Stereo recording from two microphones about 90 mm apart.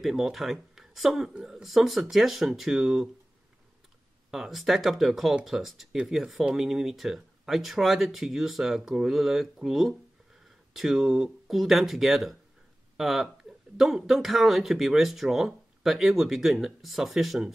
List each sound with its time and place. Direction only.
0.0 s speech: 5° right (ahead or behind)
4.3 s speech: 5° right (ahead or behind)